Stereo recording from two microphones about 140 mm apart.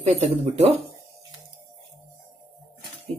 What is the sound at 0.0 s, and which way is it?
Speech, 50° right (ahead or behind).